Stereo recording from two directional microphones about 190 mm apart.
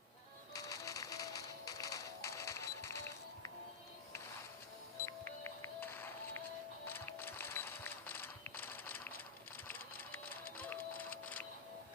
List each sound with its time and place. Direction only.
0.5 s music: 20° left (ahead or behind)
5.0 s music: 10° left (ahead or behind)
6.8 s a sound: 10° left (ahead or behind)
9.6 s sewing machine: 10° left (ahead or behind)
10.6 s music: 10° left (ahead or behind)